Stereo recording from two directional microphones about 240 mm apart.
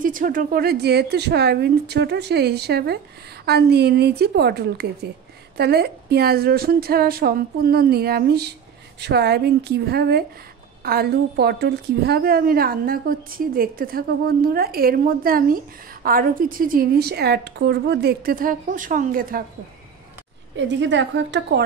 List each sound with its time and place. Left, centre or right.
0.0 s a woman's voice: right
20.5 s a woman's voice: right